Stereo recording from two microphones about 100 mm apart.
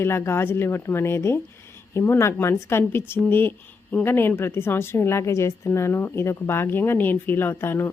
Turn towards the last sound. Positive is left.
turn(degrees=25)  # may be behind; listen again after turning